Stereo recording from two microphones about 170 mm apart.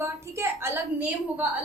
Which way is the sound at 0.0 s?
15° right (ahead or behind).